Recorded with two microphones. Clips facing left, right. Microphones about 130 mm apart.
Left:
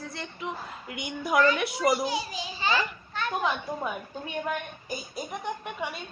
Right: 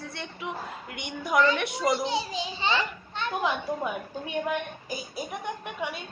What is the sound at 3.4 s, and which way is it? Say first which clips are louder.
A woman's voice: right 3 dB; 5° right (ahead or behind).